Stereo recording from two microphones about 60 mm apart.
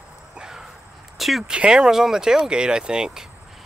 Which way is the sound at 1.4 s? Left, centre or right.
Centre.